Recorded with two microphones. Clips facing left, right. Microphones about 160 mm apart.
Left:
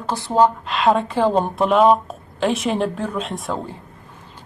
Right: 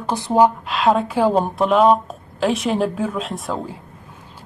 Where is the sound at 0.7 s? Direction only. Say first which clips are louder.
Even; centre (ahead or behind).